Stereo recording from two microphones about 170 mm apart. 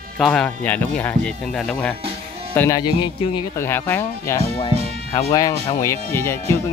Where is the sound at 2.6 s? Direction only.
20° left (ahead or behind).